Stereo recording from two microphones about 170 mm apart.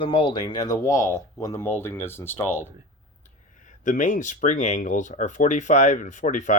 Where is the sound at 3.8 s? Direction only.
50° left (ahead or behind).